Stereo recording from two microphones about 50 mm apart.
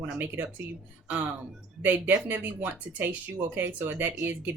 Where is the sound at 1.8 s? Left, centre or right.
Right.